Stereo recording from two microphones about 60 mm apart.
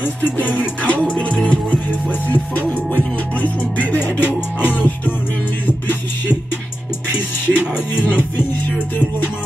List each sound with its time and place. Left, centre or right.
0.0 s music: left
7.4 s music: left